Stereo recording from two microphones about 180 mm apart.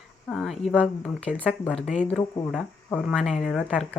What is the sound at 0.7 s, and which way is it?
Speech, 5° left (ahead or behind).